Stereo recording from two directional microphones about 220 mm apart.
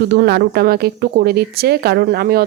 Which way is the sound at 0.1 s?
45° right (ahead or behind).